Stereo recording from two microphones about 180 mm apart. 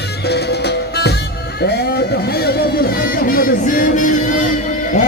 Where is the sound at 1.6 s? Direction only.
65° left (ahead or behind); by 5.0 s 45° left (ahead or behind).